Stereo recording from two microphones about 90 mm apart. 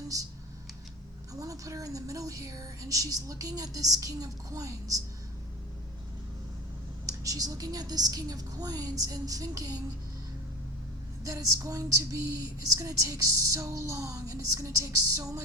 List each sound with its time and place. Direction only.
0.1 s speech: 40° right (ahead or behind)
1.3 s speech: 40° right (ahead or behind)
7.0 s a woman's voice: 40° right (ahead or behind)
11.2 s speech: 40° right (ahead or behind)